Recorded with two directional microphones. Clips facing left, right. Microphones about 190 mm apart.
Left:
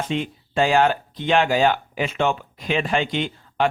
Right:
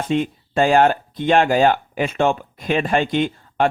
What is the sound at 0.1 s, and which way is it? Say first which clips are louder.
A man's voice: right 5 dB; 45° right (ahead or behind).